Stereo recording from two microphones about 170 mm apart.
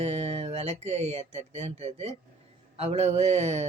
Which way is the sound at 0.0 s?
35° right (ahead or behind).